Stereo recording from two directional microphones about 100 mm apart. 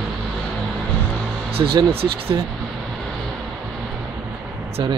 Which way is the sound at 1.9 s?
75° right (ahead or behind).